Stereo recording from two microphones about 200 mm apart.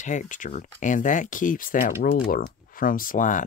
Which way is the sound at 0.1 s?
40° left (ahead or behind).